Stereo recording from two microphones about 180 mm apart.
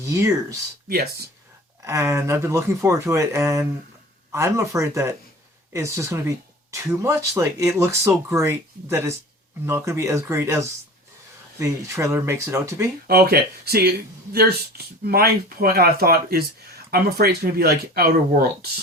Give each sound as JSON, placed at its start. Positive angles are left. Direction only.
{"t": 0.0, "sound": "speech", "side_deg": -15}
{"t": 0.9, "sound": "speech", "side_deg": -60}
{"t": 1.8, "sound": "speech", "side_deg": -15}
{"t": 13.1, "sound": "speech", "side_deg": -60}